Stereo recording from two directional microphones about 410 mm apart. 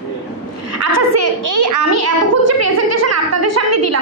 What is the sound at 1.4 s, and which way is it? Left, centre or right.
A child's voice, right.